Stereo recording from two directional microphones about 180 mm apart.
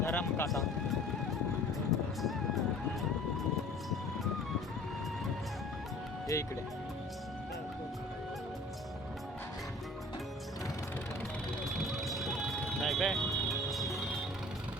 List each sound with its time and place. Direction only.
0.0 s music: 10° left (ahead or behind)
1.9 s music: centre (ahead or behind)
6.3 s speech: 15° left (ahead or behind)
11.6 s vehicle: centre (ahead or behind)
12.8 s music: centre (ahead or behind)